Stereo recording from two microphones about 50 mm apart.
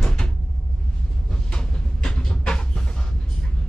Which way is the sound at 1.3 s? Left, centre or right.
Centre.